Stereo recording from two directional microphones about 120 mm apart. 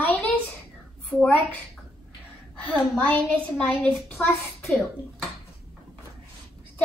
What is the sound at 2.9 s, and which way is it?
A child's voice, 10° left (ahead or behind).